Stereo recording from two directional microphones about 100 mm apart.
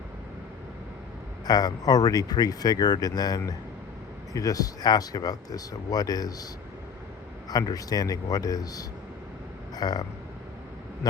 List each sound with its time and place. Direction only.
1.5 s speech: 40° left (ahead or behind)
7.5 s speech: 40° left (ahead or behind)